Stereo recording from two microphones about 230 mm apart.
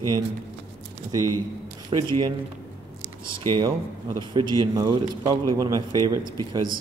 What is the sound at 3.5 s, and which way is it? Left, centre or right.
A man's voice, centre.